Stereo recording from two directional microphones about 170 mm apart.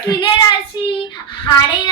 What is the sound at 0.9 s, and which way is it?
Speech, 30° left (ahead or behind).